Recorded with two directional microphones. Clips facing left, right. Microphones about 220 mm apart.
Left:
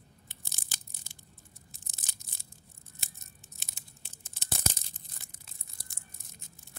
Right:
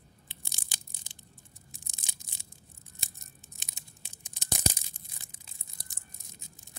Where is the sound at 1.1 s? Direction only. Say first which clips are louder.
Even; 15° right (ahead or behind).